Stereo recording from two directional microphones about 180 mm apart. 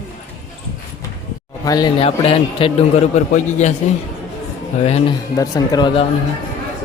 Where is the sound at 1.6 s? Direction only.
20° left (ahead or behind); by 3.7 s 40° left (ahead or behind).